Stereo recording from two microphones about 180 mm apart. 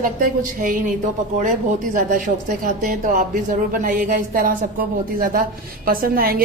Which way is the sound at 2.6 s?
45° right (ahead or behind).